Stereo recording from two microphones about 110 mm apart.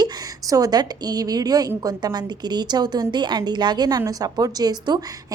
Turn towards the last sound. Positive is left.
turn(degrees=-35)  # may be behind; listen again after turning